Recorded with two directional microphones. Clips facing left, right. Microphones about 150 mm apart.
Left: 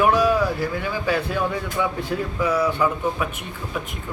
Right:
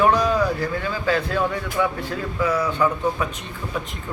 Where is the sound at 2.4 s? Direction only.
10° left (ahead or behind).